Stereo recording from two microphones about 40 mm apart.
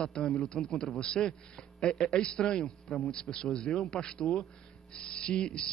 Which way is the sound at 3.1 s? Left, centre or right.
Centre.